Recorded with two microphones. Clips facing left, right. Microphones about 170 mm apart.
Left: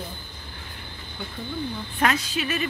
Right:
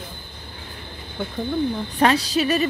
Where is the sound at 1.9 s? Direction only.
35° right (ahead or behind).